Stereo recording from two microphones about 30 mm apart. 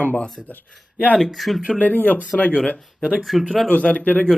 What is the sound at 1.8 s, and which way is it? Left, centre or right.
Speech, left.